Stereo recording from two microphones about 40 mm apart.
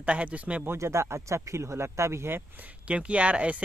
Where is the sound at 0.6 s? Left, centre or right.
Right.